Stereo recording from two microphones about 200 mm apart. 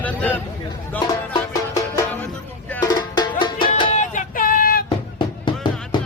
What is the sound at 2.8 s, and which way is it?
Music, 20° left (ahead or behind).